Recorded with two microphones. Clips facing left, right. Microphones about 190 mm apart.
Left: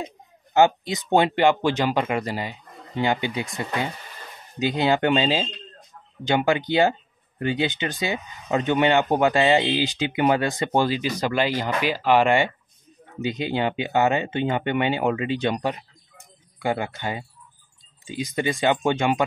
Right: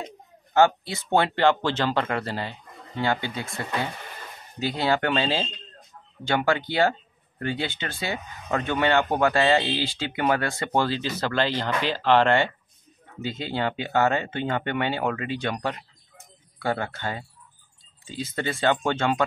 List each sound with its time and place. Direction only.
0.0 s speech: 20° left (ahead or behind)